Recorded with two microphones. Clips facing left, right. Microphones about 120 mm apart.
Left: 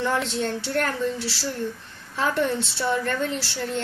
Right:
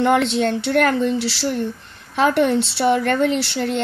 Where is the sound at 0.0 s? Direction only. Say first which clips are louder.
Right 8 dB; 70° right (ahead or behind).